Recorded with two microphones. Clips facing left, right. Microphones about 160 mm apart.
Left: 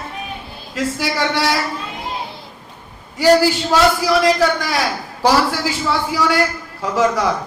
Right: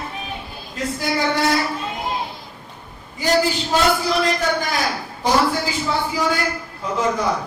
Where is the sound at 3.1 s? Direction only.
80° left.